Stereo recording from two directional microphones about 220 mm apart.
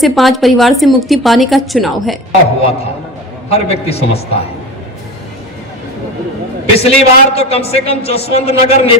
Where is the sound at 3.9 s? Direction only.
25° left (ahead or behind).